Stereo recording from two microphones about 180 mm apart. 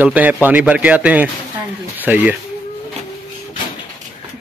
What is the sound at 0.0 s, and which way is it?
A man's voice, 10° right (ahead or behind).